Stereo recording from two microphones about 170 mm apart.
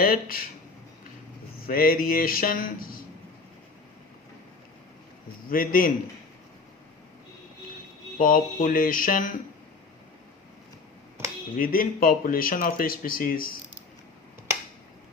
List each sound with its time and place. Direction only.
0.0 s speech: 60° left (ahead or behind)
1.6 s speech: 60° left (ahead or behind)
5.5 s speech: 55° left (ahead or behind)
8.2 s speech: 55° left (ahead or behind)
11.5 s speech: 55° left (ahead or behind)